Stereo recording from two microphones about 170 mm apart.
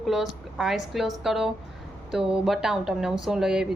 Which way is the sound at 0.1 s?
Centre (ahead or behind).